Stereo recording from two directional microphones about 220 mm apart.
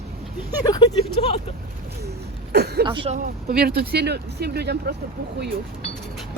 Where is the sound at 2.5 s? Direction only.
45° right (ahead or behind).